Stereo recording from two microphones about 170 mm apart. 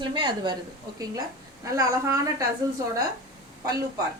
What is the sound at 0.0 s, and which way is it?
Speech, 25° right (ahead or behind).